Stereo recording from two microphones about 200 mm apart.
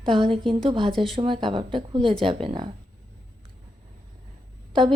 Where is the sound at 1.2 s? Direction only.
25° right (ahead or behind).